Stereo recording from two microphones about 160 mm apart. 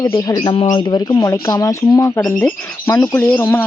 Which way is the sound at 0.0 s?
20° left (ahead or behind).